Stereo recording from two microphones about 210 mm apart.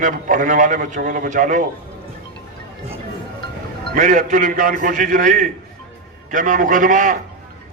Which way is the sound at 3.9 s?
40° right (ahead or behind).